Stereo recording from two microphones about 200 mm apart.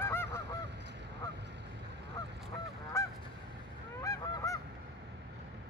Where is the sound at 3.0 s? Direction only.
15° left (ahead or behind).